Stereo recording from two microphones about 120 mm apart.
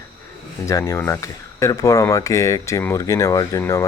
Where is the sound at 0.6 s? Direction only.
25° left (ahead or behind).